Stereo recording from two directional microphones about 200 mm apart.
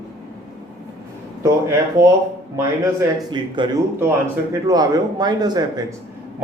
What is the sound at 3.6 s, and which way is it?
Speech, 25° right (ahead or behind).